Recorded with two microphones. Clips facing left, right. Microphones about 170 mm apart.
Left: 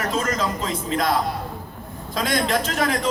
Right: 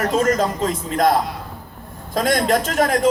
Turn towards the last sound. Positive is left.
turn(degrees=-45)  # may be behind; listen again after turning